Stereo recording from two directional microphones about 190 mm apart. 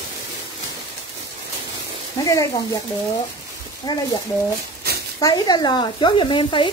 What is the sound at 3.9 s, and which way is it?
Speech, 20° left (ahead or behind).